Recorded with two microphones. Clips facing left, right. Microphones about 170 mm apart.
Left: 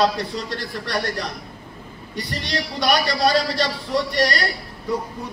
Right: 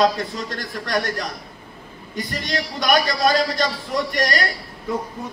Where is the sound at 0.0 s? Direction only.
45° right (ahead or behind).